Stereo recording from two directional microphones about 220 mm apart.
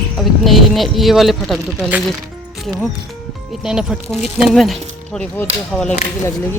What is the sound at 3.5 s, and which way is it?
Speech, 5° right (ahead or behind).